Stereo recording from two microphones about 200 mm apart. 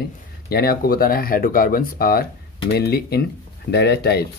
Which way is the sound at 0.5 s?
50° left (ahead or behind).